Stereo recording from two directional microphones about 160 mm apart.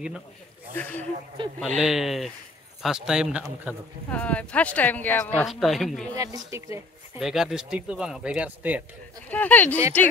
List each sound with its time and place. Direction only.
0.7 s speech: 10° left (ahead or behind)
1.4 s speech: 30° right (ahead or behind)
1.8 s speech: centre (ahead or behind)
4.1 s speech: 10° left (ahead or behind)
5.5 s speech: centre (ahead or behind)
6.1 s speech: 20° right (ahead or behind)
7.2 s speech: 5° right (ahead or behind)
9.3 s speech: 10° left (ahead or behind)